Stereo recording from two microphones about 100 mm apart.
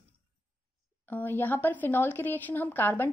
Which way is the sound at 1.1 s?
20° left (ahead or behind).